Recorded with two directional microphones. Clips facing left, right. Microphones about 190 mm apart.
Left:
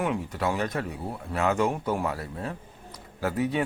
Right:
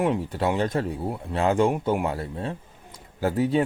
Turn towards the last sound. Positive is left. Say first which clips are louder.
# right 4 dB
turn(degrees=-30)  # may be behind; listen again after turning